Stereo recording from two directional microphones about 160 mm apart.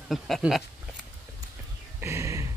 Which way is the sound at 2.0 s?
20° right (ahead or behind).